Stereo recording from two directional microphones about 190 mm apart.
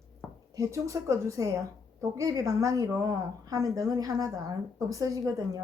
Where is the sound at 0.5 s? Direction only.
15° right (ahead or behind).